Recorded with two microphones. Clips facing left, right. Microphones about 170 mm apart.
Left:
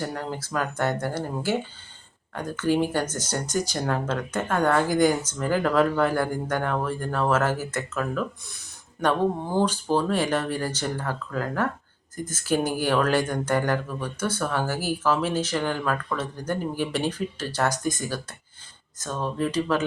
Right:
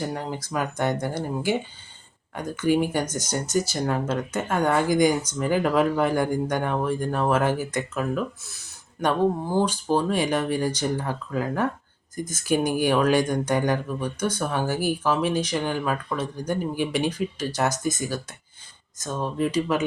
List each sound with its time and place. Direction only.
0.0 s speech: 15° right (ahead or behind)
17.7 s speech: 10° left (ahead or behind)
19.0 s speech: 10° right (ahead or behind)